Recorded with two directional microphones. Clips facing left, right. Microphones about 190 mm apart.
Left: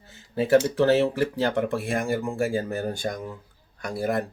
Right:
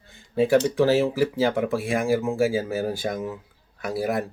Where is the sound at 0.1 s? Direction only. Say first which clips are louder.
Even; centre (ahead or behind).